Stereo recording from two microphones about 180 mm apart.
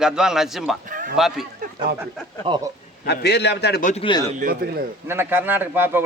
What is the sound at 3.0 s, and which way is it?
Speech, 65° left (ahead or behind).